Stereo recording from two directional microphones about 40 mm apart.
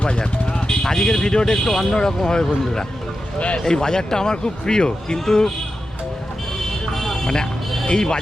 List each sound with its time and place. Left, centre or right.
0.0 s speech: left
6.6 s vehicle: centre
7.9 s speech: centre